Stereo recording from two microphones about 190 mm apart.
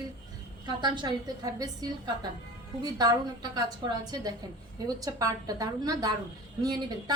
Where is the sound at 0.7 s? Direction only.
25° right (ahead or behind).